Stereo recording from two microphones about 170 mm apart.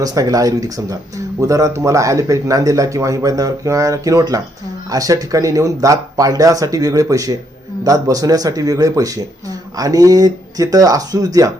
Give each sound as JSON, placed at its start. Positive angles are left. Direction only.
{"t": 0.0, "sound": "speech", "side_deg": -20}